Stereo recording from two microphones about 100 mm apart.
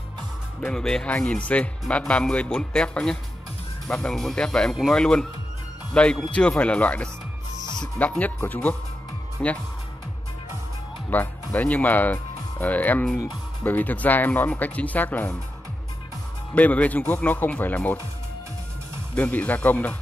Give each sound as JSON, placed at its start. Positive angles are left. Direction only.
{"t": 0.6, "sound": "speech", "side_deg": 5}
{"t": 11.1, "sound": "speech", "side_deg": 15}
{"t": 16.5, "sound": "speech", "side_deg": 15}
{"t": 19.1, "sound": "speech", "side_deg": 15}